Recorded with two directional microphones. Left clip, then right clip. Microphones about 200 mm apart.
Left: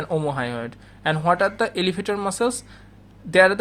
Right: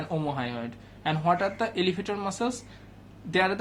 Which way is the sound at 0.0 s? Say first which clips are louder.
Left 7 dB; 35° left (ahead or behind).